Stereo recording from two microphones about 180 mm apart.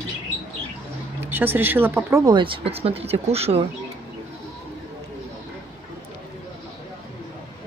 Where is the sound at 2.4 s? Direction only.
30° right (ahead or behind).